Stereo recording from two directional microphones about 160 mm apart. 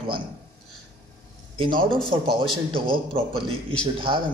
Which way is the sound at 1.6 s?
30° right (ahead or behind).